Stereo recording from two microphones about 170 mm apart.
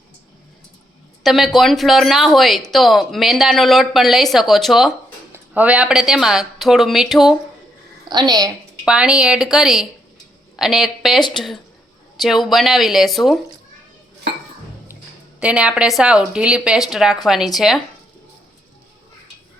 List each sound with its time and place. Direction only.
1.2 s speech: centre (ahead or behind)
8.0 s a woman's voice: 25° right (ahead or behind)
8.8 s speech: 5° right (ahead or behind)
15.4 s speech: 5° right (ahead or behind)